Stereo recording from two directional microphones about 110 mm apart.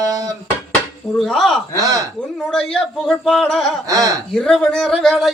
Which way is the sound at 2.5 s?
5° left (ahead or behind).